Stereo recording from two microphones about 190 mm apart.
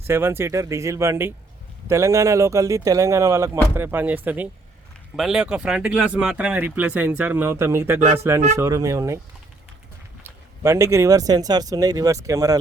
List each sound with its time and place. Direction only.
0.1 s speech: 10° right (ahead or behind)
10.2 s speech: 15° right (ahead or behind)